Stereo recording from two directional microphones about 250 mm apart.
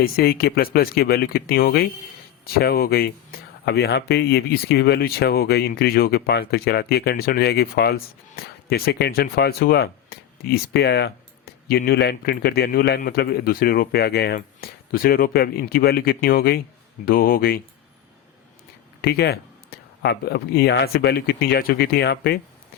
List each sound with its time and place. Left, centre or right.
0.0 s speech: left
19.0 s speech: left